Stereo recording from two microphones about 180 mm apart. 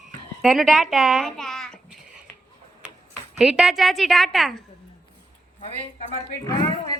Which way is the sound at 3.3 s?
5° right (ahead or behind).